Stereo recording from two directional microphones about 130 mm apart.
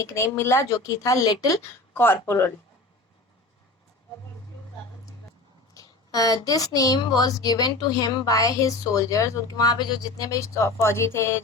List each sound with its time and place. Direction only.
0.0 s a woman's voice: 20° left (ahead or behind)
1.6 s speech: 15° left (ahead or behind)
5.7 s a woman's voice: 30° left (ahead or behind)